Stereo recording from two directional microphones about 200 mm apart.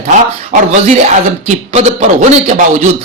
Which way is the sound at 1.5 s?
35° right (ahead or behind).